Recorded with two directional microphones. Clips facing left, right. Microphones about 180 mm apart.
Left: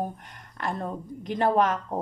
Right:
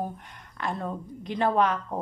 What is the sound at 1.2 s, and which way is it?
Speech, 45° left (ahead or behind).